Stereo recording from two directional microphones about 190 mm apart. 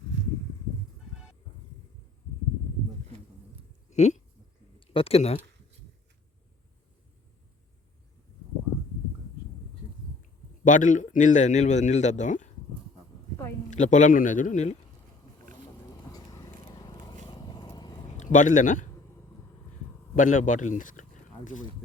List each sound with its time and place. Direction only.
3.8 s a sound: 35° left (ahead or behind)
4.9 s a man's voice: 30° left (ahead or behind)
10.6 s a man's voice: 45° left (ahead or behind)
13.7 s a man's voice: 40° left (ahead or behind)
16.1 s a sound: 20° left (ahead or behind)
17.2 s vehicle: 20° left (ahead or behind)
18.2 s speech: 40° left (ahead or behind)
20.1 s speech: 45° left (ahead or behind)